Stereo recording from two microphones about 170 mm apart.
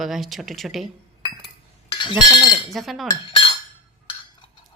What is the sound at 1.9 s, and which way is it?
Chink, 25° left (ahead or behind).